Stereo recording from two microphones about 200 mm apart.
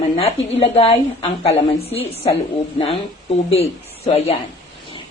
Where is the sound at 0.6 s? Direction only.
30° left (ahead or behind).